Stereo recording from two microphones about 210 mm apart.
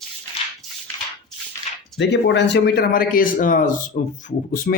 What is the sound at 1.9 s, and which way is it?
Speech, 55° left (ahead or behind).